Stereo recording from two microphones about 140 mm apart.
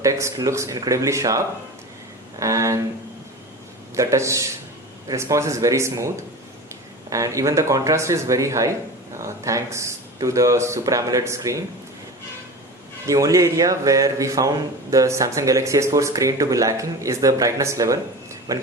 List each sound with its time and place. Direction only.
0.0 s a man's voice: 20° right (ahead or behind)
2.4 s a man's voice: 25° right (ahead or behind)
3.9 s a man's voice: 20° right (ahead or behind)
7.1 s a man's voice: 25° right (ahead or behind)
13.1 s a man's voice: 25° right (ahead or behind)